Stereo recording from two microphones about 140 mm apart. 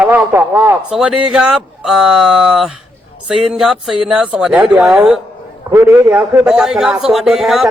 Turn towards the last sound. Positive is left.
turn(degrees=0)  # may be behind; listen again after turning